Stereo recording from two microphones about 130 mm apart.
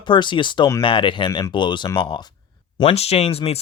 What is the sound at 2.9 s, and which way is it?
Speech, 55° left (ahead or behind).